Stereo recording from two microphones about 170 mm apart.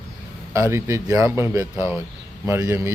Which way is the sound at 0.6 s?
15° right (ahead or behind).